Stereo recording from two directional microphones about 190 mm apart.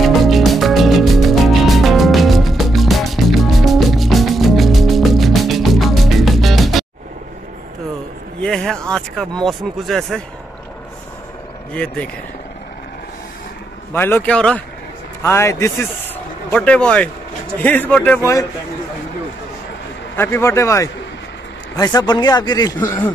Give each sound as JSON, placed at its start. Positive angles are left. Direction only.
{"t": 0.0, "sound": "music", "side_deg": 0}
{"t": 8.4, "sound": "a sound", "side_deg": 5}
{"t": 9.4, "sound": "speech", "side_deg": 0}
{"t": 11.7, "sound": "speech", "side_deg": 5}
{"t": 13.9, "sound": "a man's voice", "side_deg": 10}
{"t": 20.2, "sound": "a man's voice", "side_deg": 15}